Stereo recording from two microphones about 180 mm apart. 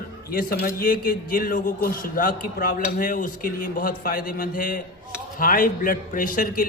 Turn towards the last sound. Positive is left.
turn(degrees=50)  # may be behind; listen again after turning